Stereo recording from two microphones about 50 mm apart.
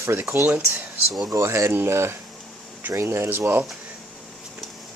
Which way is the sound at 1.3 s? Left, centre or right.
Right.